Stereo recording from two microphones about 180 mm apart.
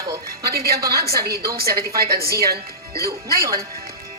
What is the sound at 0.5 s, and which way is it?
A woman's voice, 60° right (ahead or behind).